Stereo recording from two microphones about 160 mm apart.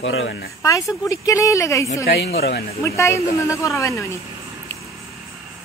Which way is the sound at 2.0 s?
80° left.